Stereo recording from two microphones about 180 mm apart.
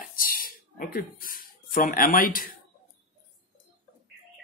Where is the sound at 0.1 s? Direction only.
50° left (ahead or behind).